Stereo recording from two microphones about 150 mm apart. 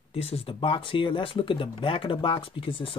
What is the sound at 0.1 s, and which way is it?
Speech, 40° left (ahead or behind).